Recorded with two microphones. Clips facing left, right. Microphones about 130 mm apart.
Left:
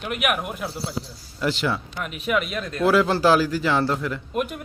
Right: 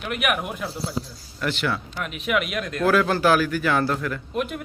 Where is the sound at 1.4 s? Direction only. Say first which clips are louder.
Left 2 dB; 15° left (ahead or behind).